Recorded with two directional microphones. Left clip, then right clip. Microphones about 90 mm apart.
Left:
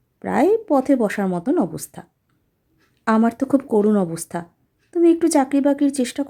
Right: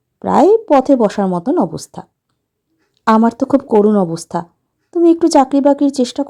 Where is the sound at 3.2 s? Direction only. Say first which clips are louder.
Right 6 dB; 30° right (ahead or behind).